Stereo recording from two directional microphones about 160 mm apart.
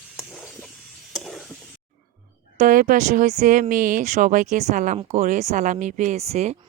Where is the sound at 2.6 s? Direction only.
55° right (ahead or behind).